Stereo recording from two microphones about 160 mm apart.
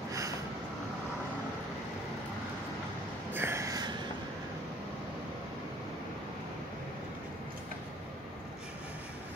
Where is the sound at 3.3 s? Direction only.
15° right (ahead or behind).